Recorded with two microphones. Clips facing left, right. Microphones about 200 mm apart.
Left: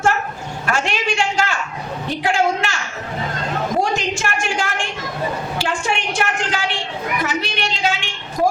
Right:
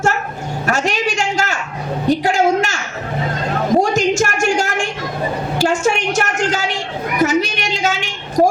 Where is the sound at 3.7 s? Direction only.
45° right (ahead or behind).